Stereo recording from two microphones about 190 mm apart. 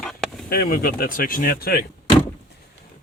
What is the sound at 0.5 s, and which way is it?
Speech, 55° left (ahead or behind).